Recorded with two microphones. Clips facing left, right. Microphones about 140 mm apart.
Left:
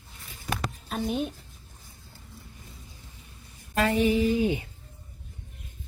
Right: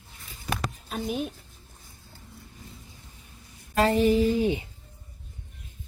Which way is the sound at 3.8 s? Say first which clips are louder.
Right 2 dB; 35° right (ahead or behind).